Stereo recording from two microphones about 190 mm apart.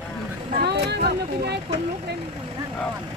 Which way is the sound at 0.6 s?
60° right (ahead or behind).